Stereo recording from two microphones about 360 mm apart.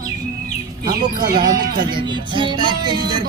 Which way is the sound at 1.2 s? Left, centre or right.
Right.